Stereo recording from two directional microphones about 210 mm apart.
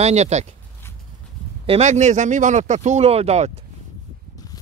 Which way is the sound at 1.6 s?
30° right (ahead or behind).